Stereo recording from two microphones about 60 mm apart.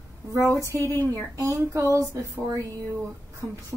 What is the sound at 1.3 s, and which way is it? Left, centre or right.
A woman's voice, right.